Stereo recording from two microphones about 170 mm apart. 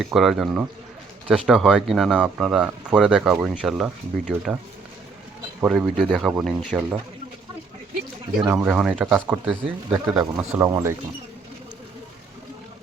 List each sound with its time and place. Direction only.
0.0 s speech: centre (ahead or behind)
5.5 s speech: 5° right (ahead or behind)
8.4 s speech: 10° right (ahead or behind)